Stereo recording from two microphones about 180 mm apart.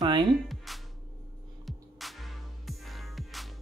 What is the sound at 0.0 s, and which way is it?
Music, 25° right (ahead or behind).